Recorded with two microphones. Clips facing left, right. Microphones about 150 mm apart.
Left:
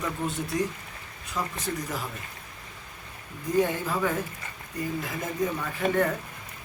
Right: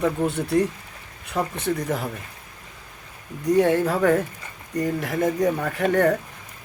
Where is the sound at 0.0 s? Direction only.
65° right (ahead or behind).